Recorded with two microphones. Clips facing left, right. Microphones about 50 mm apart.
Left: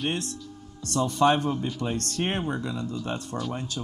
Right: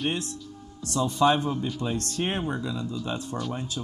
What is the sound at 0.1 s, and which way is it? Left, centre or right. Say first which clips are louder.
A man's voice: even; left.